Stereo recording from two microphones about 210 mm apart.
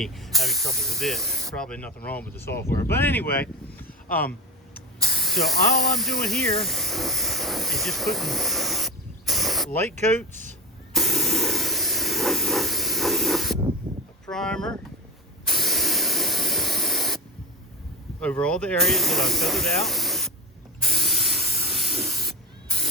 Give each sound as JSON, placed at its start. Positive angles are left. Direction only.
{"t": 0.0, "sound": "speech", "side_deg": 0}
{"t": 5.0, "sound": "spray", "side_deg": 0}
{"t": 5.8, "sound": "speech", "side_deg": 0}
{"t": 10.9, "sound": "hiss", "side_deg": 0}
{"t": 13.8, "sound": "a sound", "side_deg": -20}
{"t": 14.3, "sound": "speech", "side_deg": 5}
{"t": 15.4, "sound": "spray", "side_deg": 0}
{"t": 18.2, "sound": "speech", "side_deg": 5}
{"t": 20.8, "sound": "spray", "side_deg": 0}